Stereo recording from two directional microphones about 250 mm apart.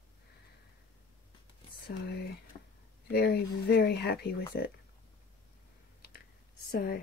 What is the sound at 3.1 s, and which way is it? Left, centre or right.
Speech, left.